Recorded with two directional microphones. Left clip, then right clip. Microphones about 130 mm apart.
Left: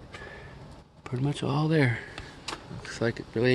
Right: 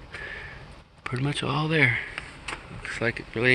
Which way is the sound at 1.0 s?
15° left (ahead or behind).